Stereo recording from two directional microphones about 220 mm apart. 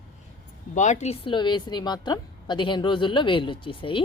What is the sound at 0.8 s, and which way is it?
A woman's voice, 30° left (ahead or behind).